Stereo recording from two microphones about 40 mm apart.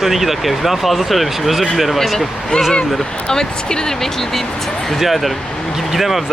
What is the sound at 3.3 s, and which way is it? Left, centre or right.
Speech, centre.